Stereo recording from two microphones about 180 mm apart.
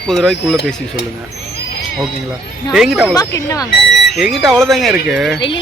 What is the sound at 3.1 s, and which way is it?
Speech, 20° left (ahead or behind).